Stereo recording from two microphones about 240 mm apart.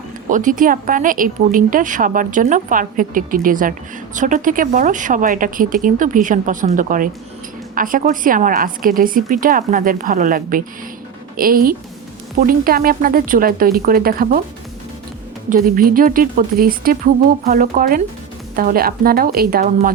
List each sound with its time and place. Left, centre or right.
0.3 s speech: right
15.4 s speech: right